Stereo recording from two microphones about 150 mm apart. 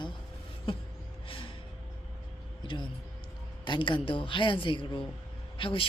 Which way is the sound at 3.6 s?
30° left (ahead or behind).